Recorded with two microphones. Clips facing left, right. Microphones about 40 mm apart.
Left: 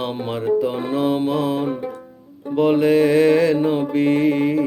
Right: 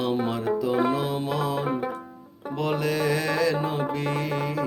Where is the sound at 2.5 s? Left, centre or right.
Left.